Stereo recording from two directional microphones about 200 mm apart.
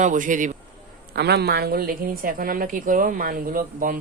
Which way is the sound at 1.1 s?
55° right (ahead or behind).